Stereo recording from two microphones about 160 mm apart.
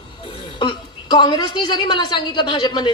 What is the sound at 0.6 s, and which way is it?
A woman's voice, 30° left (ahead or behind).